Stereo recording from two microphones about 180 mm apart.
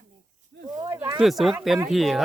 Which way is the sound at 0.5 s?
65° right (ahead or behind).